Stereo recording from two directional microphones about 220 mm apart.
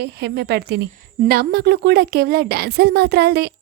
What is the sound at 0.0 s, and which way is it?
A woman's voice, 50° right (ahead or behind).